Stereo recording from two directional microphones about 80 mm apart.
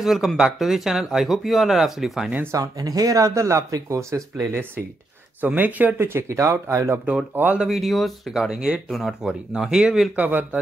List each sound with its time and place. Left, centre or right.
0.0 s speech: centre
2.4 s speech: right
5.4 s speech: right
7.5 s speech: centre